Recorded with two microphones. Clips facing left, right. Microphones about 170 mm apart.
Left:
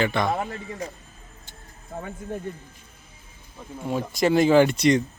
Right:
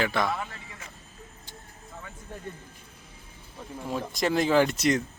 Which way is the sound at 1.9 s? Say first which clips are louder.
Left 10 dB; 50° left (ahead or behind).